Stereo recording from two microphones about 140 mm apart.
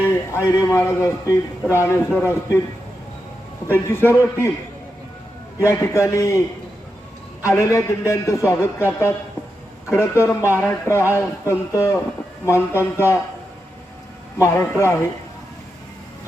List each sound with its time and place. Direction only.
0.3 s a man's voice: 20° left (ahead or behind)
3.7 s a man's voice: 15° left (ahead or behind)
5.5 s a man's voice: 20° left (ahead or behind)
7.4 s a man's voice: 20° left (ahead or behind)
14.4 s a man's voice: 20° left (ahead or behind)